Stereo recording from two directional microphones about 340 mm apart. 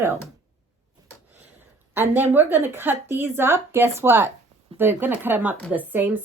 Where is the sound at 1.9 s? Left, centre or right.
Centre.